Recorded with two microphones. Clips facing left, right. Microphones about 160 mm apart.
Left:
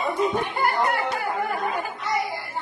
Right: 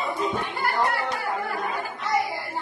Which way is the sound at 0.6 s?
20° left (ahead or behind).